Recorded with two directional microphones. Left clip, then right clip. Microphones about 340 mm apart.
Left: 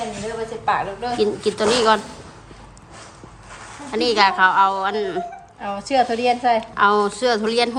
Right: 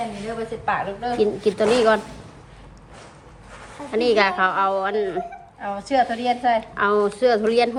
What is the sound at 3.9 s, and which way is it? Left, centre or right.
A woman's voice, centre.